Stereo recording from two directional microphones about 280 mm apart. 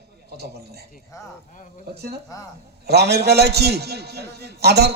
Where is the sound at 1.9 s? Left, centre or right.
Right.